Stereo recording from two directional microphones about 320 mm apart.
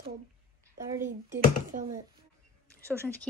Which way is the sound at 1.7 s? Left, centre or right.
Right.